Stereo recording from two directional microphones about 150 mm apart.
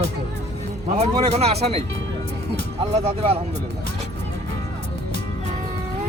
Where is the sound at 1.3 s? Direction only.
45° right (ahead or behind).